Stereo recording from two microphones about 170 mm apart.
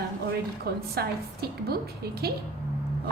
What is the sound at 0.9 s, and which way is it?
A woman's voice, 65° right (ahead or behind).